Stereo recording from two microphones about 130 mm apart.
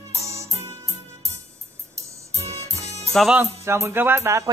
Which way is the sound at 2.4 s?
50° right (ahead or behind).